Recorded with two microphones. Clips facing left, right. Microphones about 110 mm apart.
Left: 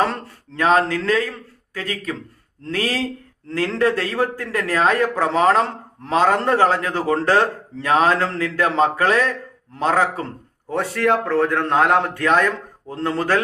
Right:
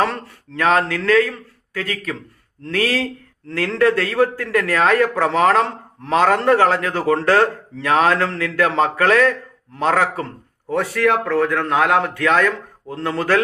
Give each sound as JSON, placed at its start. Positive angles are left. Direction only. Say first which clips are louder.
{"t": 0.0, "sound": "a man's voice", "louder": "right 1 dB", "side_deg": 20}